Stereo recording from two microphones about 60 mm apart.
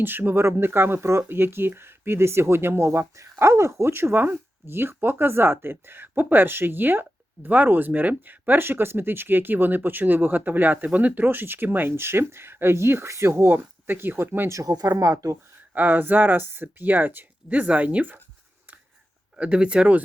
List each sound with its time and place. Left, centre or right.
0.0 s speech: right
14.5 s speech: right
15.7 s speech: right
19.4 s speech: centre